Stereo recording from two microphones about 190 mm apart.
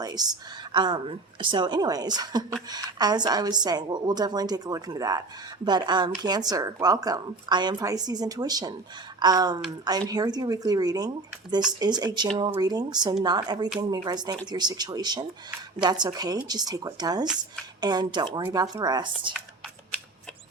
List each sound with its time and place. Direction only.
0.0 s a woman's voice: 20° right (ahead or behind)